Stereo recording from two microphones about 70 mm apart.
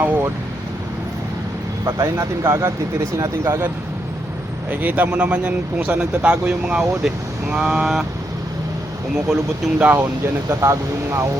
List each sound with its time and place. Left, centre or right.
1.8 s speech: right
4.7 s speech: right; by 8.0 s centre
9.1 s speech: centre
10.6 s speech: right